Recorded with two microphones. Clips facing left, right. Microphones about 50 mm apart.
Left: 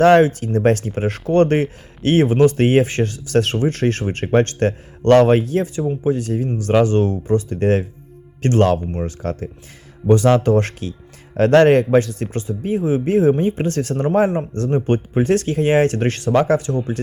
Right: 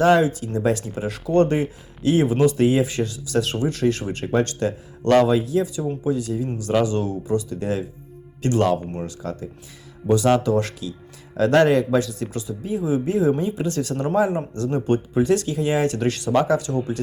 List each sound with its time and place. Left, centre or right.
0.0 s speech: left
8.9 s speech: left
10.1 s speech: left